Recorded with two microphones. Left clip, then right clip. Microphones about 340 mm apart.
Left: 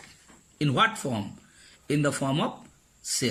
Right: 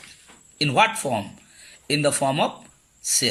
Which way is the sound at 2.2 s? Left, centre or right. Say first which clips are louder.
Right 7 dB; right.